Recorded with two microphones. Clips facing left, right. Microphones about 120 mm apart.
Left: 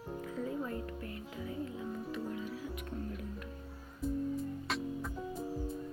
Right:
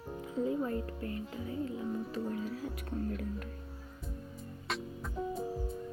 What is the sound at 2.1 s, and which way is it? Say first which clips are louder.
Music: right 3 dB; 40° right (ahead or behind).